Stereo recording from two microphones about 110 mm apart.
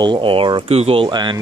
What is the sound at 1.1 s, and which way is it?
Speech, 40° right (ahead or behind).